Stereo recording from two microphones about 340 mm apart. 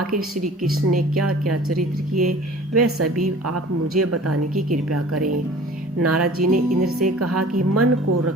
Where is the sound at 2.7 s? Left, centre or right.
Right.